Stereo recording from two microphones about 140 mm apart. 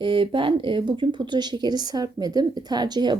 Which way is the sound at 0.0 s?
40° right (ahead or behind).